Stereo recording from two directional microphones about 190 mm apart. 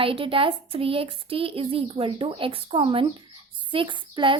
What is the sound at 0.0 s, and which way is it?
A woman's voice, 30° right (ahead or behind).